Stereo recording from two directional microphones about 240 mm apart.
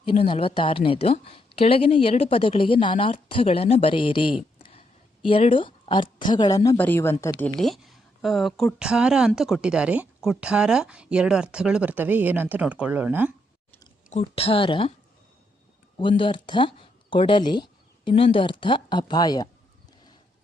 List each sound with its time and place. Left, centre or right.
0.0 s a woman's voice: left; by 13.3 s centre
14.1 s a woman's voice: left
16.0 s speech: left